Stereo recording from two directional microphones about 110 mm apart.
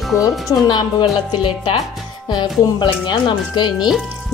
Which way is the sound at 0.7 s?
45° left (ahead or behind).